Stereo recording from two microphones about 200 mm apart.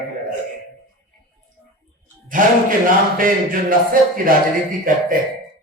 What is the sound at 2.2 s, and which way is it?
A man's voice, 40° right (ahead or behind).